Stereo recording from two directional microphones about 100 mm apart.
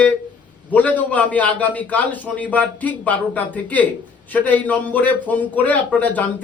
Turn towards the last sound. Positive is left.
turn(degrees=15)  # may be behind; listen again after turning